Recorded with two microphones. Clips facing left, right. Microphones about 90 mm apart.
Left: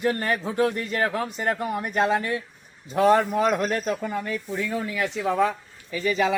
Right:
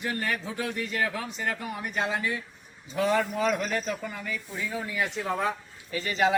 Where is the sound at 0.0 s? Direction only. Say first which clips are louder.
Left 6 dB; 40° left (ahead or behind); by 5.1 s 70° left (ahead or behind).